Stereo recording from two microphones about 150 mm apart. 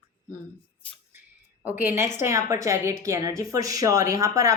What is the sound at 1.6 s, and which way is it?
A woman's voice, 10° right (ahead or behind).